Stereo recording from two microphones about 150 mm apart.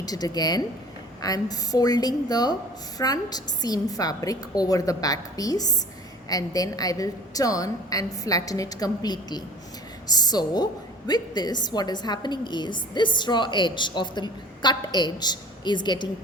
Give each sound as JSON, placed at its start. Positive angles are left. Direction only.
{"t": 0.0, "sound": "a woman's voice", "side_deg": 25}